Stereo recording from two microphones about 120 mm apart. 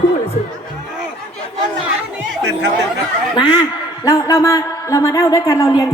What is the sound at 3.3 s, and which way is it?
Speech, 40° left (ahead or behind).